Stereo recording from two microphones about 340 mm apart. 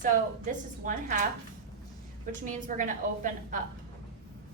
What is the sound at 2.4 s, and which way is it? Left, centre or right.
Speech, right.